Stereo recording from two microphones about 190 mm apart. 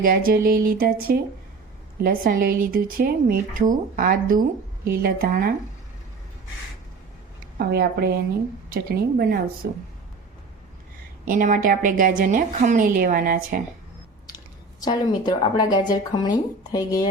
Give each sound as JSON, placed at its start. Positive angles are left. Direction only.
{"t": 0.0, "sound": "speech", "side_deg": -50}
{"t": 7.6, "sound": "speech", "side_deg": -55}
{"t": 11.3, "sound": "speech", "side_deg": -45}
{"t": 14.8, "sound": "speech", "side_deg": 20}